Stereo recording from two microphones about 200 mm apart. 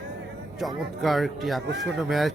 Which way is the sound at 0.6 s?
Centre (ahead or behind).